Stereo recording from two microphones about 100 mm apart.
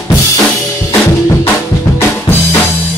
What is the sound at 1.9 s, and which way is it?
Drum kit, 20° left (ahead or behind).